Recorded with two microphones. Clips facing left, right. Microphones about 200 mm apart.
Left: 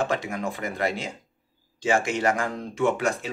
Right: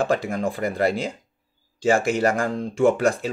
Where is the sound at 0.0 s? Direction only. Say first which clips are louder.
Right 4 dB; 35° right (ahead or behind).